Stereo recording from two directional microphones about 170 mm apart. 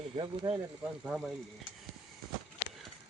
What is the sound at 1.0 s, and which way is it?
Speech, 5° right (ahead or behind).